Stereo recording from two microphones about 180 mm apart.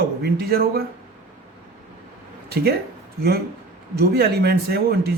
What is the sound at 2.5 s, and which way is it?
Speech, 60° right (ahead or behind).